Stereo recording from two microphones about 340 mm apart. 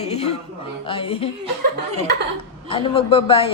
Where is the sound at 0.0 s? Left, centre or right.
Centre.